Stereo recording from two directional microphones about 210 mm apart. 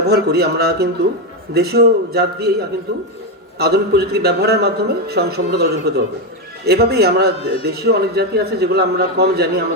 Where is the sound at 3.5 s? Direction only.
50° right (ahead or behind).